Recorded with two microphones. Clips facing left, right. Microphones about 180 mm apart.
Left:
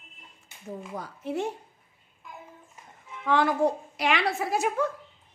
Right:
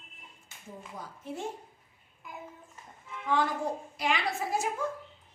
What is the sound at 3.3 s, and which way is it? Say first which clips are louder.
A woman's voice: left 6 dB; 70° left (ahead or behind).